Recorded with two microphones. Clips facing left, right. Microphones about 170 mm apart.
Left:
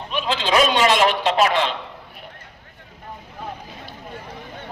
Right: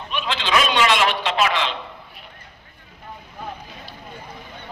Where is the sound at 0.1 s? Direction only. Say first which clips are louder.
Left 2 dB; 40° left (ahead or behind).